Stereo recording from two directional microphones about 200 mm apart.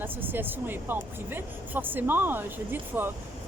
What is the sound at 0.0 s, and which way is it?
Speech, 10° right (ahead or behind).